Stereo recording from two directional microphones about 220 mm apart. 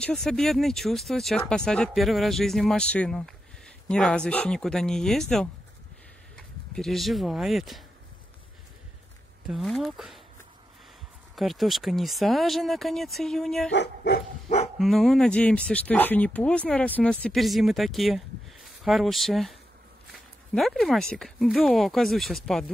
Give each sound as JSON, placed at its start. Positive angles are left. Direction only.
{"t": 0.0, "sound": "speech", "side_deg": 5}
{"t": 9.5, "sound": "speech", "side_deg": 0}
{"t": 11.3, "sound": "speech", "side_deg": 0}
{"t": 13.7, "sound": "speech", "side_deg": 50}
{"t": 14.8, "sound": "speech", "side_deg": 0}
{"t": 20.5, "sound": "speech", "side_deg": 0}